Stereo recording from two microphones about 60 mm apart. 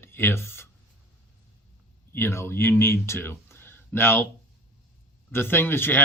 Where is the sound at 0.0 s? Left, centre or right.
Left.